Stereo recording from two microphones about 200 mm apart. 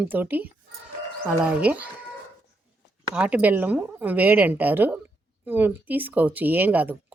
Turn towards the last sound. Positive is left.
turn(degrees=-10)  # may be behind; listen again after turning